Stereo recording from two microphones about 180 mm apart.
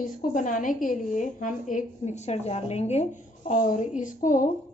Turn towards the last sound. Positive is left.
turn(degrees=45)  # may be behind; listen again after turning